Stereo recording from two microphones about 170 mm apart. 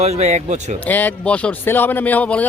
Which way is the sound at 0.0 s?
40° right (ahead or behind).